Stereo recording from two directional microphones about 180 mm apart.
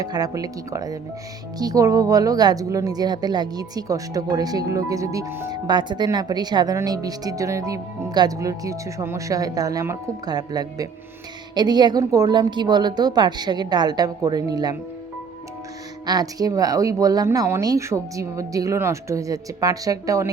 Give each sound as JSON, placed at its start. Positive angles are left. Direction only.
{"t": 0.0, "sound": "speech", "side_deg": -20}
{"t": 16.0, "sound": "speech", "side_deg": -20}